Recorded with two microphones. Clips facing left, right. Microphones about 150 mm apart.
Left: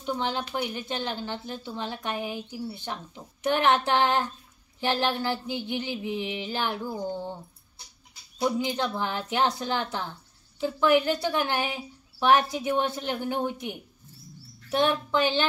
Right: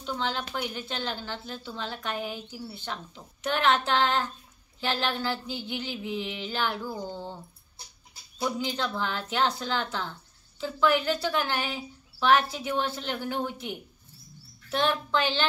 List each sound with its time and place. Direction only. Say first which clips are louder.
0.1 s a woman's voice: left 2 dB; 20° left (ahead or behind)
8.4 s a woman's voice: left 3 dB; 20° left (ahead or behind)